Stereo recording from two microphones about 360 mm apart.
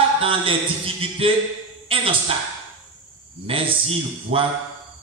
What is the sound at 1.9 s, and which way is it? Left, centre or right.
Speech, centre.